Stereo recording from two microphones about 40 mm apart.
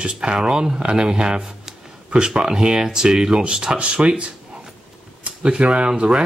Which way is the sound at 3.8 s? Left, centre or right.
Right.